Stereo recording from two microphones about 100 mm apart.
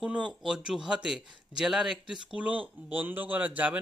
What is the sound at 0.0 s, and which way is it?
A man's voice, 10° right (ahead or behind).